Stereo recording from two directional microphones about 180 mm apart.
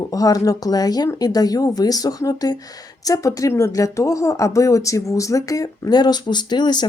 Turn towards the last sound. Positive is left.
turn(degrees=25)  # may be behind; listen again after turning